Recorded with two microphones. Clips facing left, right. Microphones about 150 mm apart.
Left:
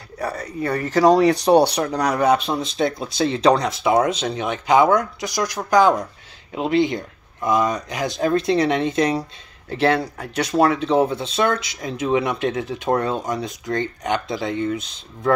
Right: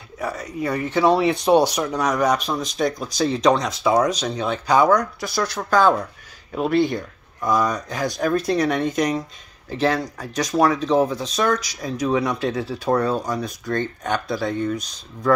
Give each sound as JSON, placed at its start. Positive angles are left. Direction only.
{"t": 0.8, "sound": "speech", "side_deg": 40}